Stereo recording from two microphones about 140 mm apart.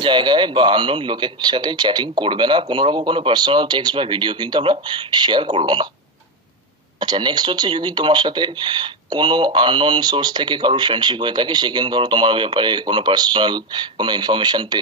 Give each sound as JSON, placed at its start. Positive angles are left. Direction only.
{"t": 0.0, "sound": "speech", "side_deg": -35}
{"t": 7.0, "sound": "speech", "side_deg": -30}